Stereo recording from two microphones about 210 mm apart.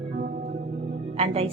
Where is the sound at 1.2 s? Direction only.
30° right (ahead or behind).